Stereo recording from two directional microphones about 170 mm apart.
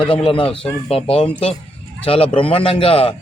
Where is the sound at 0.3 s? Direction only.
30° left (ahead or behind).